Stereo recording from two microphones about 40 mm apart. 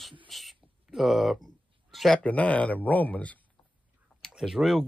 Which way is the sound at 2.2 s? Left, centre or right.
Left.